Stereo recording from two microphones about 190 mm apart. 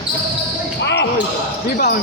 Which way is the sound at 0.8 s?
65° left (ahead or behind).